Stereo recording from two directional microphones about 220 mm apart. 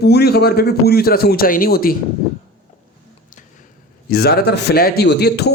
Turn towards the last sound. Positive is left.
turn(degrees=50)  # may be behind; listen again after turning